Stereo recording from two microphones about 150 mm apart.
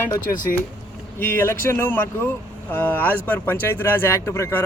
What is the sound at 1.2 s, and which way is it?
Speech, 15° left (ahead or behind).